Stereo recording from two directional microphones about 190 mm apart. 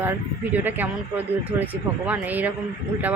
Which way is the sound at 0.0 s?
10° right (ahead or behind).